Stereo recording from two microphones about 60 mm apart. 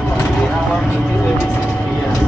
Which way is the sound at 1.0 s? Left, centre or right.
Left.